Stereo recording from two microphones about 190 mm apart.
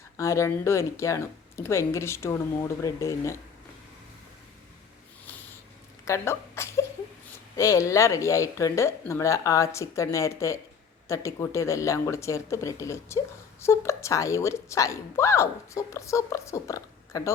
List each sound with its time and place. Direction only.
0.2 s speech: 15° left (ahead or behind)
6.1 s a sound: 15° left (ahead or behind)
7.5 s speech: 15° left (ahead or behind)